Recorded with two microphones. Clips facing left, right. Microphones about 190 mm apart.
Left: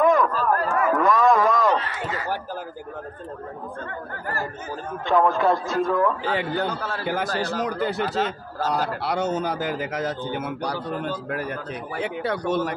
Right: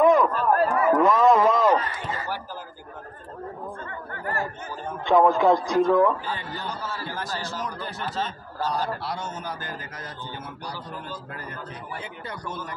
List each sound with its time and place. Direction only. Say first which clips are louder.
0.2 s a sound: right 1 dB; 15° right (ahead or behind)
5.0 s a man's voice: right 2 dB; 15° right (ahead or behind)
6.2 s a man's voice: left 8 dB; 75° left (ahead or behind)